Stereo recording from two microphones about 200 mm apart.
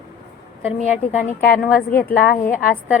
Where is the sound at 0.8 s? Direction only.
35° left (ahead or behind).